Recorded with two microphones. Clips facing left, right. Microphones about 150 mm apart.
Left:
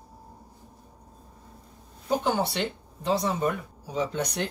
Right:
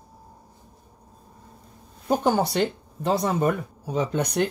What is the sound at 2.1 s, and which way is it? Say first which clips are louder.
Speech: right 4 dB; 45° right (ahead or behind).